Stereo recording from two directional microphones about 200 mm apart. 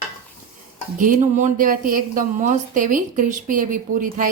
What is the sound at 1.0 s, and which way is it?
Speech, 40° right (ahead or behind).